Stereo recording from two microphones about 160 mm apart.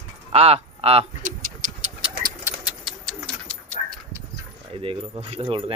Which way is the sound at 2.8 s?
5° left (ahead or behind).